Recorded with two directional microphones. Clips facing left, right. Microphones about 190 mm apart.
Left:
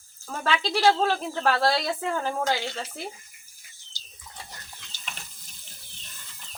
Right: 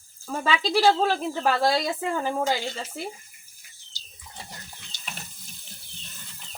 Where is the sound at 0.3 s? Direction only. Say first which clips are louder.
Right 2 dB; centre (ahead or behind).